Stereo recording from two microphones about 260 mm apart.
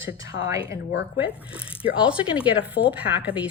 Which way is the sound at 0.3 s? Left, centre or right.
Left.